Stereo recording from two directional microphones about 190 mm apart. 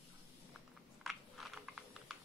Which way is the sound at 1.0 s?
Centre (ahead or behind).